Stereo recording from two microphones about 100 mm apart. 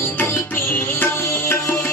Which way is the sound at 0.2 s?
20° left (ahead or behind).